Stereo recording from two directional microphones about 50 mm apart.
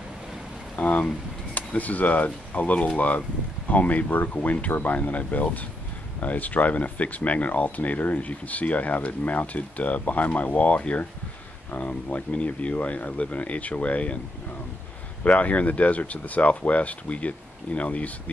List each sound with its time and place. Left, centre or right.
0.7 s a sound: left
1.5 s speech: left
15.2 s speech: left